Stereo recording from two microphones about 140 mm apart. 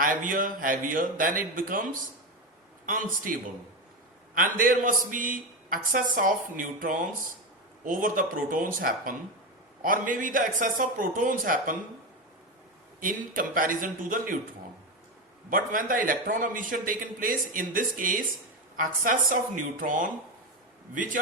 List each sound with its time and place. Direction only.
0.0 s a man's voice: 75° right (ahead or behind)
13.0 s a man's voice: 80° right
15.4 s a man's voice: 80° right